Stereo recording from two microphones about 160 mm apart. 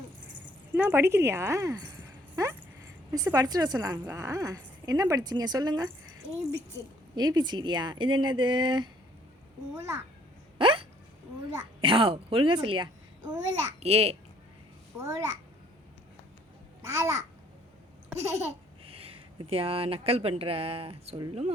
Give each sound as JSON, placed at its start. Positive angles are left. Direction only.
{"t": 0.7, "sound": "a woman's voice", "side_deg": -15}
{"t": 7.2, "sound": "a woman's voice", "side_deg": -25}
{"t": 10.6, "sound": "hiccup", "side_deg": -30}
{"t": 11.8, "sound": "a child's voice", "side_deg": -35}
{"t": 13.7, "sound": "a child's voice", "side_deg": -40}
{"t": 15.0, "sound": "a woman's voice", "side_deg": -20}
{"t": 16.8, "sound": "a child's voice", "side_deg": -15}
{"t": 18.9, "sound": "speech", "side_deg": -35}